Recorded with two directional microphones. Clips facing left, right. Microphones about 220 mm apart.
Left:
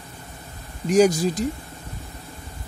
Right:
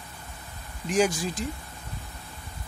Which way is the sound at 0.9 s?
40° left (ahead or behind).